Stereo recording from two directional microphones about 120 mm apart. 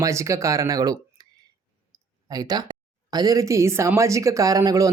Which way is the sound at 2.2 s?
30° right (ahead or behind).